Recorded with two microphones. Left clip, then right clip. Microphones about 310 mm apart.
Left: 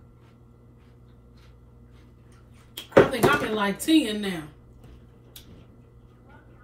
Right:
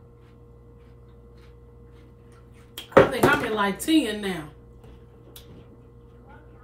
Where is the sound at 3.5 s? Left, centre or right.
Centre.